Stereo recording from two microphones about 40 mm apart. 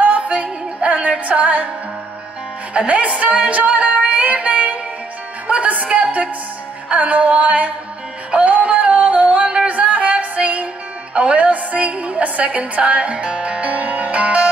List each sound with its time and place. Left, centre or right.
0.0 s music: right
2.7 s music: right
6.0 s music: right
6.9 s music: right
8.3 s yodeling: right
9.8 s music: right
11.1 s a woman's voice: right